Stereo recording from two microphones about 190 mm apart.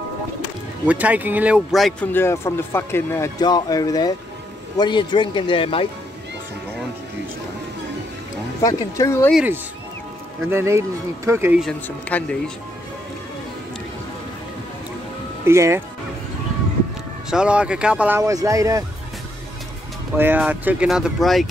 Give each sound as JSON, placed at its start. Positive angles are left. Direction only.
{"t": 0.8, "sound": "speech", "side_deg": -5}
{"t": 2.1, "sound": "speech", "side_deg": 15}
{"t": 8.6, "sound": "speech", "side_deg": 15}
{"t": 9.3, "sound": "speech", "side_deg": -5}
{"t": 11.6, "sound": "speech", "side_deg": 5}
{"t": 15.4, "sound": "speech", "side_deg": -15}
{"t": 17.3, "sound": "speech", "side_deg": -5}
{"t": 20.2, "sound": "speech", "side_deg": -10}